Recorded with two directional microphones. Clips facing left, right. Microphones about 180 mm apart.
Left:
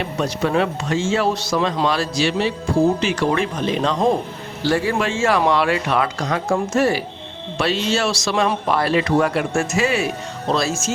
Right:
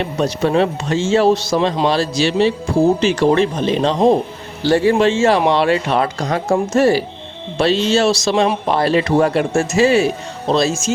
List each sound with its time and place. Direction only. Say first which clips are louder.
0.4 s speech: right 3 dB; 30° right (ahead or behind)